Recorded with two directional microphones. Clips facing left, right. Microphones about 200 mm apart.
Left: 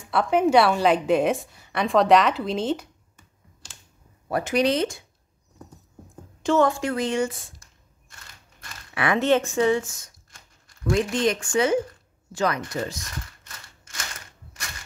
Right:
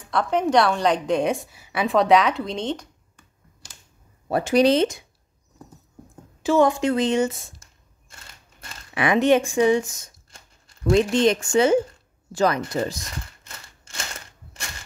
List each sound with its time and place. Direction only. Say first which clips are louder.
0.0 s a woman's voice: left 2 dB; 5° left (ahead or behind)
4.3 s a woman's voice: right 4 dB; 30° right (ahead or behind)
6.4 s a woman's voice: right 2 dB; 10° right (ahead or behind); by 13.0 s 30° right (ahead or behind)
13.5 s scissors: right 2 dB; 30° right (ahead or behind)